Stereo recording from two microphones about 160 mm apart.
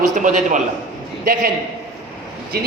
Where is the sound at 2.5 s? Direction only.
80° right.